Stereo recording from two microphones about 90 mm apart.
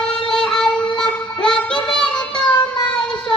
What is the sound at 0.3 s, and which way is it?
Music, 5° left (ahead or behind).